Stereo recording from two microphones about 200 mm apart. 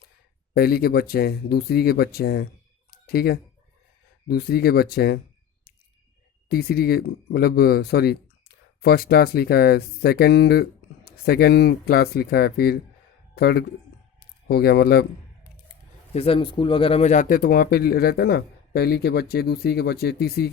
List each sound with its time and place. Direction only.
0.5 s speech: 50° left (ahead or behind)
2.9 s a sound: 50° left (ahead or behind)
4.3 s speech: 50° left (ahead or behind)
6.5 s speech: 50° left (ahead or behind)
16.1 s speech: 30° left (ahead or behind); by 20.5 s 50° left (ahead or behind)